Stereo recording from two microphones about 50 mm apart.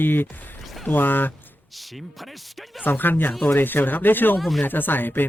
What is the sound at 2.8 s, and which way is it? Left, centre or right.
Speech, left.